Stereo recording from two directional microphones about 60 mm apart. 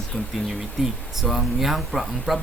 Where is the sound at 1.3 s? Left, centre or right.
Centre.